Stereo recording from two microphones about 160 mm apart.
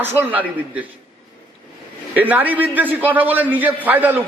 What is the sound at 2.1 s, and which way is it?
A man's voice, 10° right (ahead or behind).